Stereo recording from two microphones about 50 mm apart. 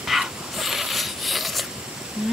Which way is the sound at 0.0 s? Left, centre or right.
Centre.